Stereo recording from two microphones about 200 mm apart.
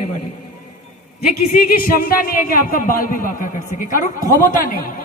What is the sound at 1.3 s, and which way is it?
A woman's voice, 45° left (ahead or behind).